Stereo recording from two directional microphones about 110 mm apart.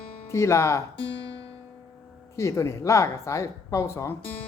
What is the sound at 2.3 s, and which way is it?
Speech, 25° left (ahead or behind).